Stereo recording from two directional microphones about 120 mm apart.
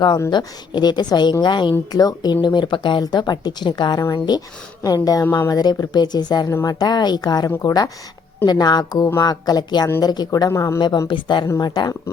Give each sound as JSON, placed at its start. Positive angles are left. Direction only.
{"t": 0.3, "sound": "speech", "side_deg": 40}
{"t": 10.8, "sound": "speech", "side_deg": 40}